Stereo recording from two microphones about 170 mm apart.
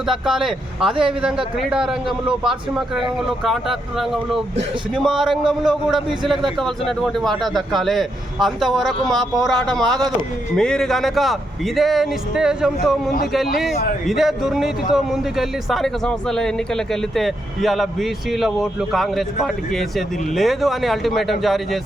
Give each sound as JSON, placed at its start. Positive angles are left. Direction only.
{"t": 0.0, "sound": "speech", "side_deg": -5}
{"t": 14.1, "sound": "speech", "side_deg": 0}